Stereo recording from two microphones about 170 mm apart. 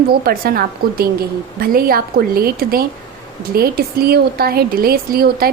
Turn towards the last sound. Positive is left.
turn(degrees=-65)  # may be behind; listen again after turning